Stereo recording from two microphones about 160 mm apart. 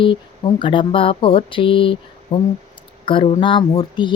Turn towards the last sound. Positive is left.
turn(degrees=30)  # may be behind; listen again after turning